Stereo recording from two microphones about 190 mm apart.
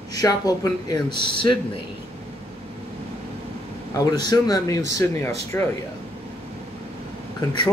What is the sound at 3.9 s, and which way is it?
Speech, 20° left (ahead or behind).